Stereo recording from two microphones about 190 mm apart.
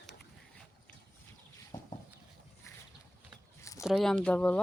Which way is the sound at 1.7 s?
20° left (ahead or behind).